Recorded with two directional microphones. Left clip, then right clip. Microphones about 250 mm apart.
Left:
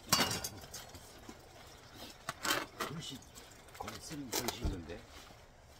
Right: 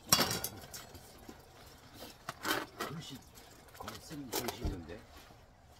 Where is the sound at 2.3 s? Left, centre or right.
Centre.